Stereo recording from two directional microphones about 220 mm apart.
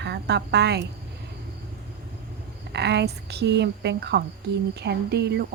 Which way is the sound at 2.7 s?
50° right (ahead or behind).